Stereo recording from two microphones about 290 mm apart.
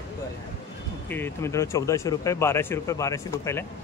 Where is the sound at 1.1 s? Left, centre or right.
Centre.